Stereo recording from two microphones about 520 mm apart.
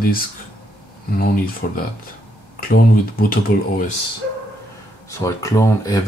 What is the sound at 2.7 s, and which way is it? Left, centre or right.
Speech, centre.